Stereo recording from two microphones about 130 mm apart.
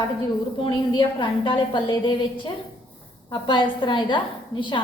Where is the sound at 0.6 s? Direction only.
40° left (ahead or behind).